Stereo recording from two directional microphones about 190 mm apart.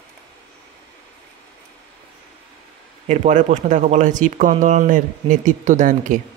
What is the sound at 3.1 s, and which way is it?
Speech, 40° right (ahead or behind).